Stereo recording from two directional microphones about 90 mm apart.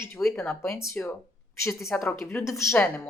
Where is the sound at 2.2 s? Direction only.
30° left (ahead or behind).